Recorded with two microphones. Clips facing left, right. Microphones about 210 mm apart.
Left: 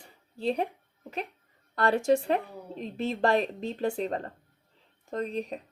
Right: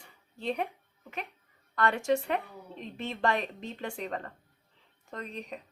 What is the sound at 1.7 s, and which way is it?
A woman's voice, 35° left (ahead or behind).